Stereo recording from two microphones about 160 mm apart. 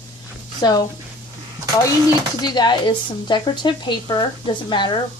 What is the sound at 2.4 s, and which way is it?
Speech, 25° left (ahead or behind).